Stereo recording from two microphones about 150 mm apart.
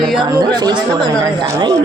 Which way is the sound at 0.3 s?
30° right (ahead or behind).